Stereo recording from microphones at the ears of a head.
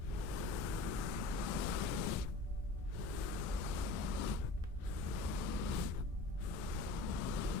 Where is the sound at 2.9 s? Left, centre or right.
Left.